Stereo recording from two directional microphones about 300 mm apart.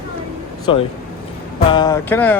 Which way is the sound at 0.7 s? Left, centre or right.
Centre.